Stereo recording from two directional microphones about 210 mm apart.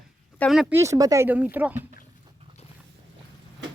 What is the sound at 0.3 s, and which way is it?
Speech, centre (ahead or behind).